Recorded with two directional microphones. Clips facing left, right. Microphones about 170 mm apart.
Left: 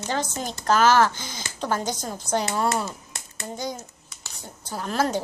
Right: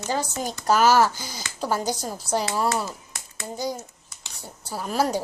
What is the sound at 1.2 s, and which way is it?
Speech, 40° right (ahead or behind).